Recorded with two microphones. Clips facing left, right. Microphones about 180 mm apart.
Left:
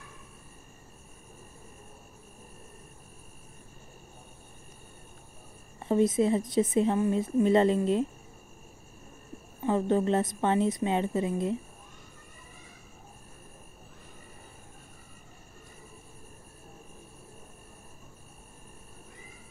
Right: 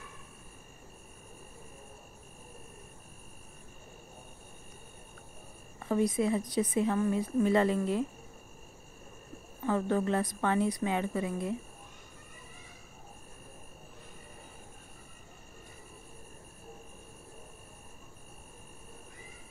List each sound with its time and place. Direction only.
5.8 s a woman's voice: 25° left (ahead or behind)
9.7 s a woman's voice: 20° left (ahead or behind)